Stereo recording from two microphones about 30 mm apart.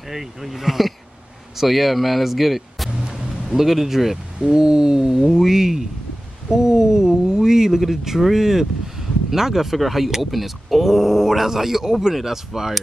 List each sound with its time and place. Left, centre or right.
0.1 s speech: centre
4.4 s a sound: right
5.2 s speech: centre